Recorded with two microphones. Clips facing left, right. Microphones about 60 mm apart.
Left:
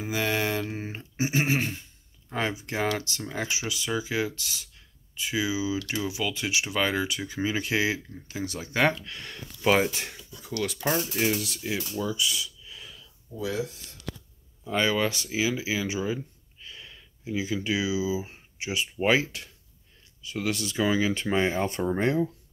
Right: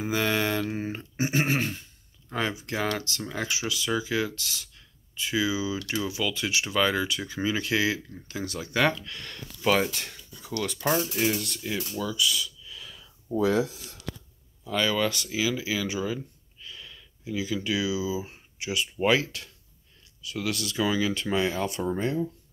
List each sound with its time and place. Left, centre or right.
0.1 s speech: centre
1.1 s speech: centre
10.4 s speech: centre
12.0 s speech: left
13.3 s speech: right
14.6 s speech: left
16.6 s a sound: left
19.0 s speech: centre